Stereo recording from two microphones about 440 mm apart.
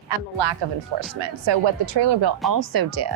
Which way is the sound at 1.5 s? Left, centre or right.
Right.